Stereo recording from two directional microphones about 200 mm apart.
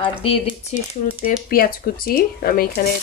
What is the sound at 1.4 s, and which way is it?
Speech, 45° left (ahead or behind).